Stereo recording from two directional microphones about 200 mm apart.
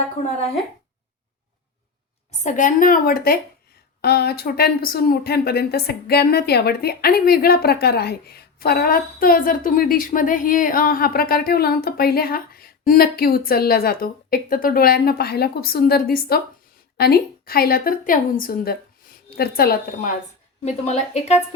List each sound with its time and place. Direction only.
2.4 s speech: 40° left (ahead or behind)
20.7 s a woman's voice: 35° left (ahead or behind)